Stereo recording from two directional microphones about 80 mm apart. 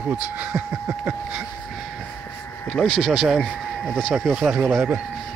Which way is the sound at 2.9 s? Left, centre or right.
Centre.